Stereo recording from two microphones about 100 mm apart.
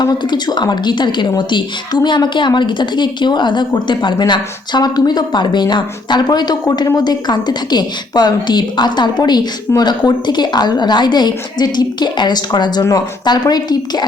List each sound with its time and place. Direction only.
0.0 s a woman's voice: 40° left (ahead or behind)